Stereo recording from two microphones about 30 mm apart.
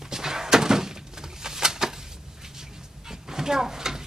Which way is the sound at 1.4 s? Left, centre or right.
Centre.